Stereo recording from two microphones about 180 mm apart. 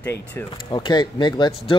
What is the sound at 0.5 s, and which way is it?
Speech, 25° left (ahead or behind).